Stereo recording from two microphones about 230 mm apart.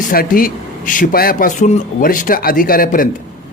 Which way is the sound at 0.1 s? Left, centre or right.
Left.